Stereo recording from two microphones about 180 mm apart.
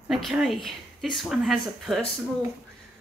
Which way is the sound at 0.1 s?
Centre (ahead or behind).